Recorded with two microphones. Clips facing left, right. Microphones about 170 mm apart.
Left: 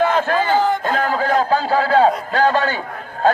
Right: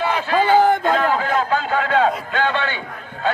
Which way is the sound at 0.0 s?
50° left (ahead or behind).